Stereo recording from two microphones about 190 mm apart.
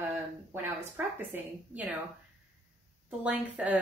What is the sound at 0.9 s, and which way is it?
Speech, 10° right (ahead or behind).